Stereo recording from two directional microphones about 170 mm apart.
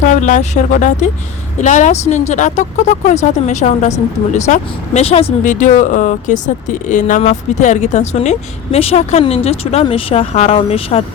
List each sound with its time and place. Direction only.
0.0 s speech: 45° left (ahead or behind)